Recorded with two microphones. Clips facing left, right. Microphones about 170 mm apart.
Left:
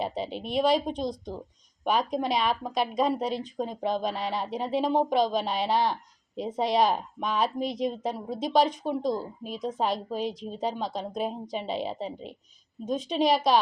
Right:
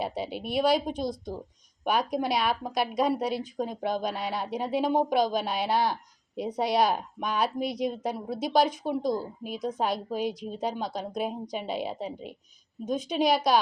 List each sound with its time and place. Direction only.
0.0 s speech: 5° right (ahead or behind)